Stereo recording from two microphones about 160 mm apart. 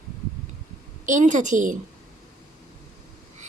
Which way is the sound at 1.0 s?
50° right (ahead or behind).